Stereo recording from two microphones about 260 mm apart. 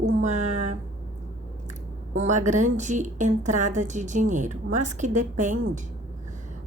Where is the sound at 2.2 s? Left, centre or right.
Right.